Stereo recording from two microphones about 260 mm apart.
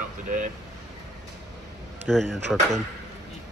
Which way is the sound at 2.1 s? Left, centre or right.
Centre.